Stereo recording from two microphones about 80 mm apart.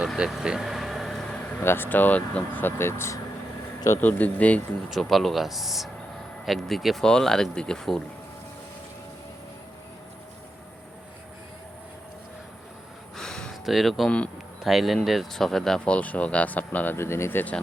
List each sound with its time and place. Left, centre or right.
0.3 s vehicle: centre
1.6 s speech: left
3.9 s speech: left
4.9 s speech: centre
13.1 s a sound: centre
13.7 s speech: centre; by 17.4 s left